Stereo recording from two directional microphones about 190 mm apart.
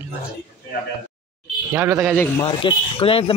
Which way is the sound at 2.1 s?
10° left (ahead or behind).